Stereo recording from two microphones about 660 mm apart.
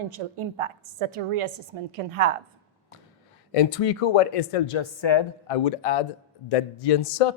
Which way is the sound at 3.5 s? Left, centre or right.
Left.